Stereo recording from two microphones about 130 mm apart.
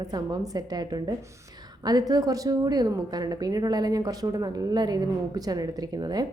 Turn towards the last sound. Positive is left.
turn(degrees=-30)  # may be behind; listen again after turning